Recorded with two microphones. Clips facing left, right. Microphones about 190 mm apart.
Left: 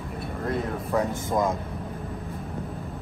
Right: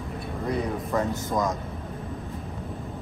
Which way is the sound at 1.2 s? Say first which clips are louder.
Left 2 dB; 25° left (ahead or behind).